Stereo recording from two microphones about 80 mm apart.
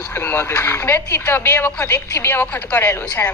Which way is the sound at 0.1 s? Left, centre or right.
Left.